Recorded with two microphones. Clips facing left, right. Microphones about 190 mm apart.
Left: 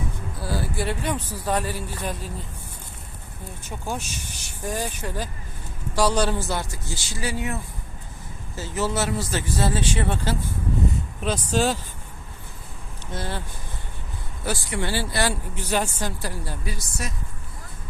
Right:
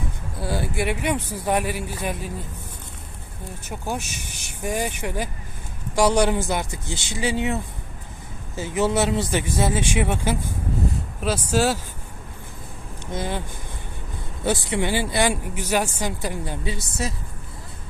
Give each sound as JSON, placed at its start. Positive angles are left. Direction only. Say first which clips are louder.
{"t": 0.3, "sound": "a man's voice", "louder": "right 3 dB", "side_deg": -20}
{"t": 3.7, "sound": "a man's voice", "louder": "right 2 dB", "side_deg": -10}
{"t": 13.1, "sound": "a man's voice", "louder": "right 4 dB", "side_deg": -15}
{"t": 14.4, "sound": "a man's voice", "louder": "right 5 dB", "side_deg": -20}